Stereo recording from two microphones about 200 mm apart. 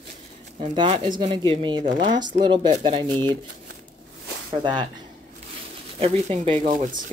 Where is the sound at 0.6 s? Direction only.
30° right (ahead or behind).